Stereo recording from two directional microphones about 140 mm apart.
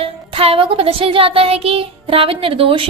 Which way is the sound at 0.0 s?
40° right (ahead or behind).